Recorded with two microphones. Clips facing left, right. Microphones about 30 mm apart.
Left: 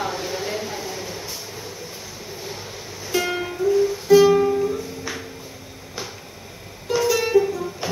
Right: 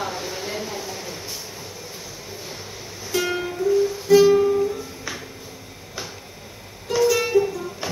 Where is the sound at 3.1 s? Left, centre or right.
Centre.